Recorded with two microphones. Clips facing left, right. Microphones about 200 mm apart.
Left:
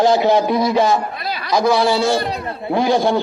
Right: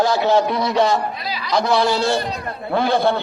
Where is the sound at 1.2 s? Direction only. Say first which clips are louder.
Left 2 dB; 55° left (ahead or behind).